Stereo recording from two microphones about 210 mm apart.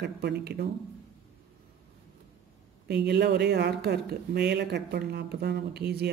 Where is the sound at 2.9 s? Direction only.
50° right (ahead or behind).